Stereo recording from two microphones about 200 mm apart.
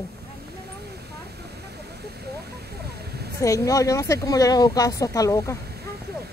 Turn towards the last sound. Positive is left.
turn(degrees=15)  # may be behind; listen again after turning